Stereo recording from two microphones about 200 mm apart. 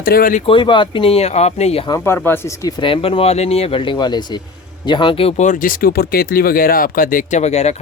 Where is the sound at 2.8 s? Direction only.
30° left (ahead or behind).